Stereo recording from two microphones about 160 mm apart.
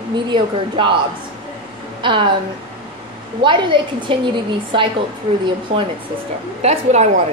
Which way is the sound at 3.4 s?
30° right (ahead or behind).